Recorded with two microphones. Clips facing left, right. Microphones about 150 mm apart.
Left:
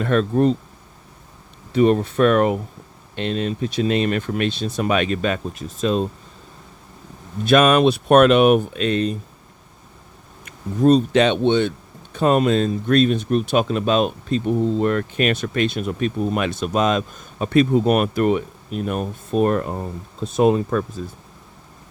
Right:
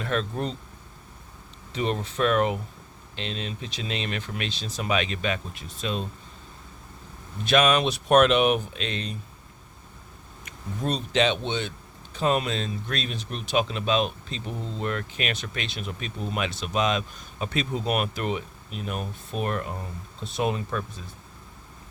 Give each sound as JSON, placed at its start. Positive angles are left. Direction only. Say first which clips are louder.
{"t": 0.0, "sound": "speech", "louder": "left 11 dB", "side_deg": 50}
{"t": 1.7, "sound": "speech", "louder": "left 12 dB", "side_deg": 55}
{"t": 7.4, "sound": "speech", "louder": "left 7 dB", "side_deg": 50}
{"t": 10.4, "sound": "speech", "louder": "left 14 dB", "side_deg": 45}